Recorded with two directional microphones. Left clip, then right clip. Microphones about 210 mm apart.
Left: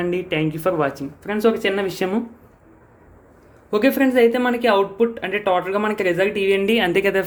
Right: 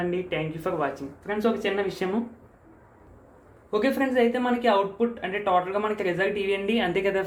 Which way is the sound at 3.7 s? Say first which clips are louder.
Left 6 dB; 50° left (ahead or behind).